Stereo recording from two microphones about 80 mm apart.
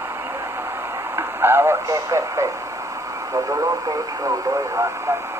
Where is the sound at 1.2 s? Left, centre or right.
Right.